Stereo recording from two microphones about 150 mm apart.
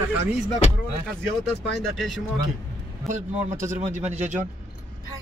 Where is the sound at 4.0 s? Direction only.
50° right (ahead or behind).